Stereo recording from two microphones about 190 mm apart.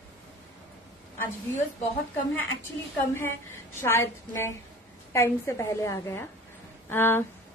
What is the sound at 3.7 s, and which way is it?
A woman's voice, 10° left (ahead or behind).